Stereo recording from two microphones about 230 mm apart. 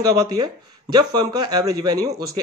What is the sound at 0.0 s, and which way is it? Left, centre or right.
Speech, centre.